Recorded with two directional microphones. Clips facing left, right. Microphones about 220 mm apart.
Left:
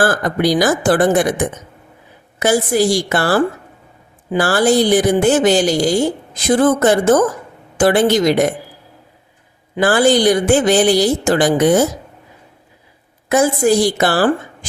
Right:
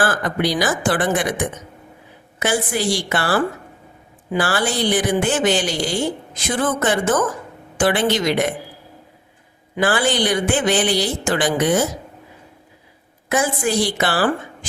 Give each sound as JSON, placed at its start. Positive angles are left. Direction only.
{"t": 0.0, "sound": "a woman's voice", "side_deg": 40}
{"t": 9.7, "sound": "a woman's voice", "side_deg": 40}
{"t": 13.2, "sound": "a woman's voice", "side_deg": 40}